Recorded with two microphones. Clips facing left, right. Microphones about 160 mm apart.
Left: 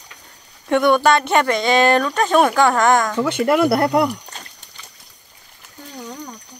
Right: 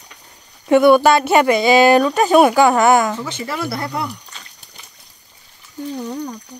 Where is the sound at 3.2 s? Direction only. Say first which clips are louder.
Left 9 dB; 60° left (ahead or behind).